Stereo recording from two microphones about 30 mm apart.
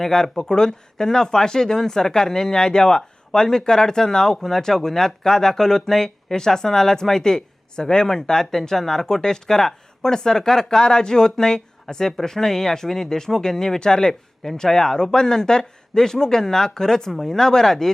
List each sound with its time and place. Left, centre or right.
0.0 s speech: left
17.1 s speech: centre
17.3 s speech: left